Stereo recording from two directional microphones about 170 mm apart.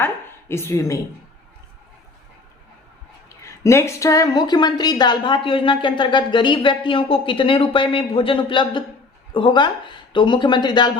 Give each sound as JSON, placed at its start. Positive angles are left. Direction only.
{"t": 0.0, "sound": "speech", "side_deg": 15}
{"t": 3.2, "sound": "speech", "side_deg": 15}